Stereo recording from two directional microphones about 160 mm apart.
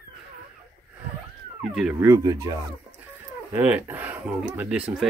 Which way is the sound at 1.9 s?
20° right (ahead or behind).